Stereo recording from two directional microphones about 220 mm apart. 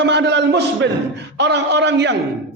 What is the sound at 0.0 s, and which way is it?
A man's voice, 50° right (ahead or behind).